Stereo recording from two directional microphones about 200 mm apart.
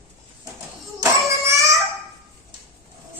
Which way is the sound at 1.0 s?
15° right (ahead or behind).